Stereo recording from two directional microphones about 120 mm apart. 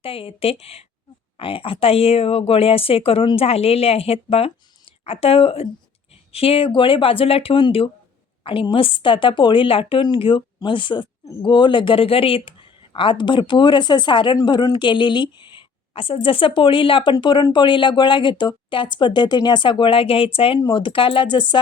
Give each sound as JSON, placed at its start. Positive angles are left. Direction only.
{"t": 0.0, "sound": "a woman's voice", "side_deg": 50}